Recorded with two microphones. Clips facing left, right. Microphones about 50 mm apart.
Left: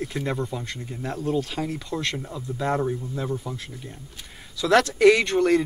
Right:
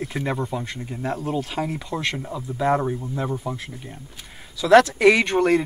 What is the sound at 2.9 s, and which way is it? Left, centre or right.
Speech, right.